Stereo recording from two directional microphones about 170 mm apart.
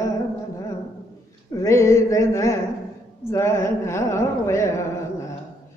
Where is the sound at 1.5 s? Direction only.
15° left (ahead or behind).